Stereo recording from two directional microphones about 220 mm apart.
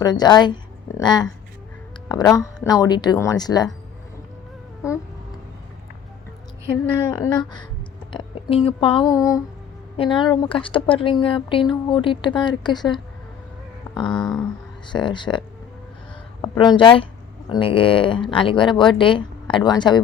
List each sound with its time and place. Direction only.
0.0 s speech: 20° left (ahead or behind)
7.1 s speech: 20° left (ahead or behind)
14.1 s a sound: 5° left (ahead or behind)
14.8 s speech: 20° left (ahead or behind)